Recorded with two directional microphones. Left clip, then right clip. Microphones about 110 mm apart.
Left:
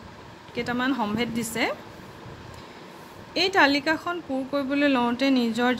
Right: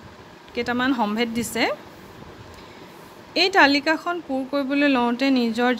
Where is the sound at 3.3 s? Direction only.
40° right (ahead or behind).